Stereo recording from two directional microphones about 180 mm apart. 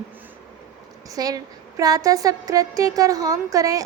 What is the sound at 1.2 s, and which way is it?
A woman's voice, 20° right (ahead or behind).